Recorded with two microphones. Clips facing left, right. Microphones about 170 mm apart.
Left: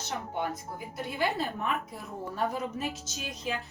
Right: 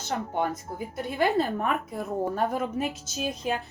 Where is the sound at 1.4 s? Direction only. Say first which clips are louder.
Right 6 dB; 50° right (ahead or behind).